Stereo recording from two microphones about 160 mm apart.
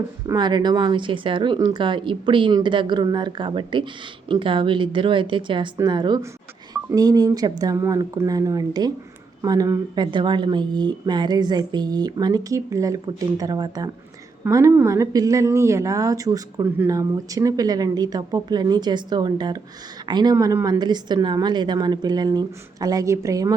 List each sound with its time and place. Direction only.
0.3 s a woman's voice: 25° right (ahead or behind)